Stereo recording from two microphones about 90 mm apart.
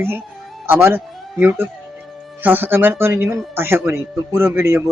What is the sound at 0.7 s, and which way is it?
Speech, 25° right (ahead or behind).